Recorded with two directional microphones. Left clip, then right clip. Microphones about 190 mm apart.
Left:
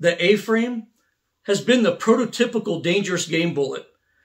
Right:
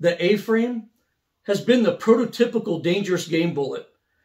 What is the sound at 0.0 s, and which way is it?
Speech, centre (ahead or behind).